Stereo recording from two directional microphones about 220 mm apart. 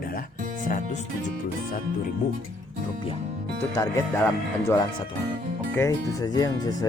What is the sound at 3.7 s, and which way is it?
Speech, 15° left (ahead or behind).